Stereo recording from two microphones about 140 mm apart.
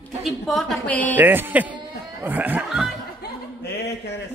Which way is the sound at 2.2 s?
10° right (ahead or behind).